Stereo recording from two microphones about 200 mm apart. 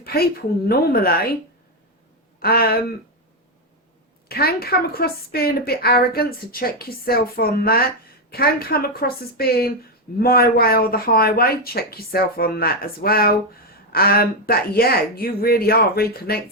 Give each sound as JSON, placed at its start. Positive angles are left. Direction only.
{"t": 0.0, "sound": "a woman's voice", "side_deg": 50}
{"t": 2.4, "sound": "a woman's voice", "side_deg": 50}
{"t": 4.3, "sound": "a woman's voice", "side_deg": 50}